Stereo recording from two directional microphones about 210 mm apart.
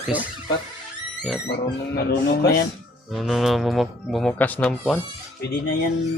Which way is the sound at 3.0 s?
Centre (ahead or behind).